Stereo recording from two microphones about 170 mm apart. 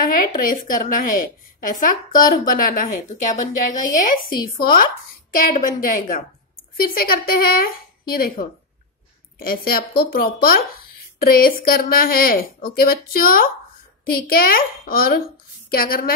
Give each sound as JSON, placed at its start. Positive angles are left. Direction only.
{"t": 0.2, "sound": "a woman's voice", "side_deg": 55}